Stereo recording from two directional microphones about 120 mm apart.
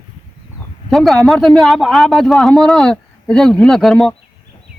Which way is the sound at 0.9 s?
Centre (ahead or behind).